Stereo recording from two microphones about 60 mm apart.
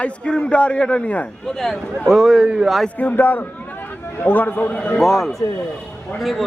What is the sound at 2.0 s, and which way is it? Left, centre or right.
Speech, centre.